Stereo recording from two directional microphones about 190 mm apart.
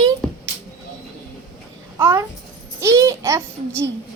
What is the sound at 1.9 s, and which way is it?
A child's voice, 15° right (ahead or behind).